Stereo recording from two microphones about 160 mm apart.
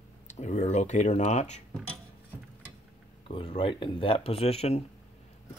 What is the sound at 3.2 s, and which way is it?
Speech, 35° left (ahead or behind).